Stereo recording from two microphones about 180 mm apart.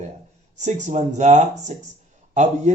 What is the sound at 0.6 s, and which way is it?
Speech, 40° right (ahead or behind).